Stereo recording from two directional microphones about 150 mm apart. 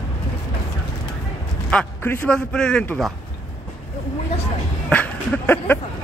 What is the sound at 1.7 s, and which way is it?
A man's voice, 10° left (ahead or behind).